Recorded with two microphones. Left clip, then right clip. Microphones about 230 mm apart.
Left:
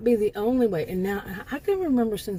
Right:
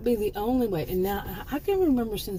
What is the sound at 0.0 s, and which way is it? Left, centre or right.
Speech, left.